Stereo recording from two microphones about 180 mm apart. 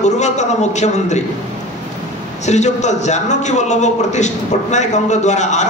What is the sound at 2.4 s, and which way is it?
A man's voice, 40° left (ahead or behind).